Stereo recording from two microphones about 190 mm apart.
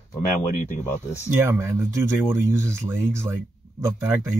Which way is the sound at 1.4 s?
15° right (ahead or behind).